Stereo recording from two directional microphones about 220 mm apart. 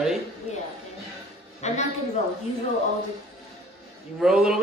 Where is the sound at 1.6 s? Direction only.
30° left (ahead or behind).